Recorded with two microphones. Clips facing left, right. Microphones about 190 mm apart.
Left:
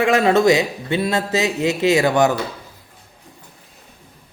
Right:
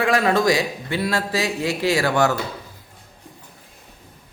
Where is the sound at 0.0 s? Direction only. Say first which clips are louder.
Left 4 dB; 25° left (ahead or behind).